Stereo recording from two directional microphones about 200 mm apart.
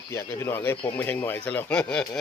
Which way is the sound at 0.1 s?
15° left (ahead or behind).